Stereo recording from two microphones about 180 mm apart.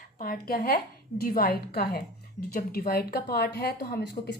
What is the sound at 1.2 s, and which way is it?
A woman's voice, 55° left (ahead or behind).